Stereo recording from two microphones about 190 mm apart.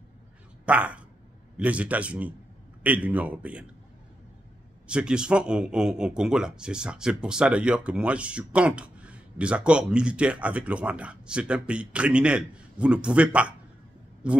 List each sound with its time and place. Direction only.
0.7 s speech: 5° right (ahead or behind)
4.8 s a man's voice: 5° right (ahead or behind)